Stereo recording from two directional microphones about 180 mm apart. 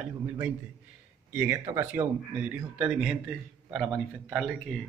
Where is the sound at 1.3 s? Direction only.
15° right (ahead or behind).